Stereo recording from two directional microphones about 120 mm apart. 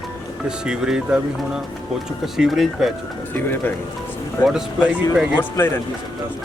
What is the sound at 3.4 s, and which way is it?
Speech, 15° left (ahead or behind).